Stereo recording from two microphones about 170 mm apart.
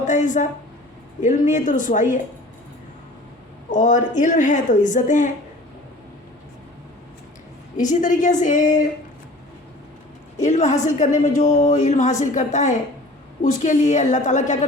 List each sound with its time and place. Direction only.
0.0 s a woman's voice: 45° left (ahead or behind)
3.7 s a woman's voice: 50° left (ahead or behind)
7.8 s a woman's voice: 50° left (ahead or behind)
10.4 s a woman's voice: 45° left (ahead or behind)